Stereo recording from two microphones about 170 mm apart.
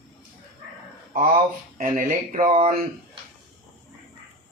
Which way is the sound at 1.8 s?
50° right (ahead or behind).